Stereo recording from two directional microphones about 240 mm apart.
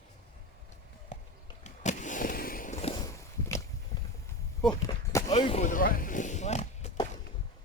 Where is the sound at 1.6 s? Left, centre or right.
Left; by 4.1 s centre.